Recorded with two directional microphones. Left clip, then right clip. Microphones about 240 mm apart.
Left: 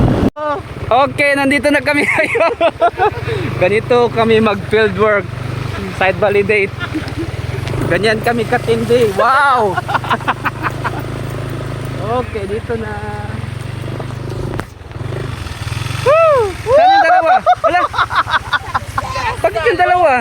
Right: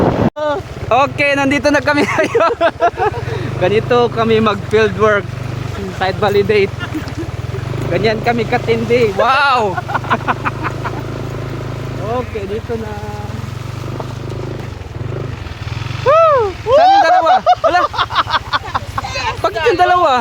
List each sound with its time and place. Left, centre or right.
0.4 s speech: centre
7.9 s speech: left; by 9.7 s centre
9.7 s vehicle: left
16.0 s a sound: centre
19.4 s speech: centre